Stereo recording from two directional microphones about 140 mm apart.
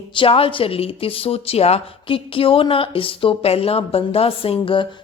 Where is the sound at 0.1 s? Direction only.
40° left (ahead or behind).